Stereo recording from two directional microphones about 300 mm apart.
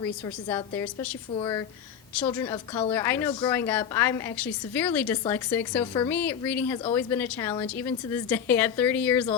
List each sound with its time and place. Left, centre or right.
0.0 s a woman's voice: centre